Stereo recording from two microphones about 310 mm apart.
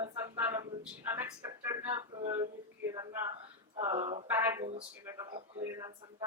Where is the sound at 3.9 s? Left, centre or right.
Right.